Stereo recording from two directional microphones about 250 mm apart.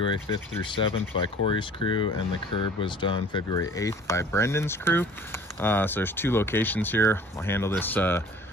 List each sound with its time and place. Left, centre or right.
0.0 s speech: centre